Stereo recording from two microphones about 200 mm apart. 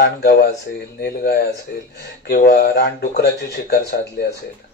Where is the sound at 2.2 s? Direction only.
55° left (ahead or behind).